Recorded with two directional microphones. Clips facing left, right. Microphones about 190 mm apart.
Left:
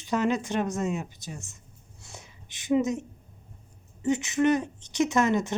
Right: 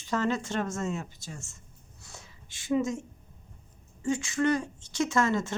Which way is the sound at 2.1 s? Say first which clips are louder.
Left 3 dB; 20° left (ahead or behind).